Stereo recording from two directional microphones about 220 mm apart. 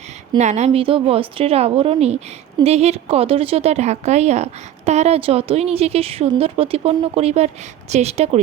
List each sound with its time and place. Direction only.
0.3 s a woman's voice: 30° right (ahead or behind)